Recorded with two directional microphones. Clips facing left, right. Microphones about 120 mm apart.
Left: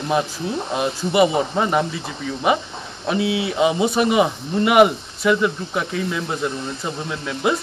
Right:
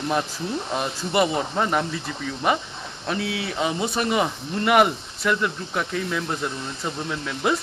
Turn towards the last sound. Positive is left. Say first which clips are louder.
# left 2 dB
turn(degrees=5)  # may be behind; listen again after turning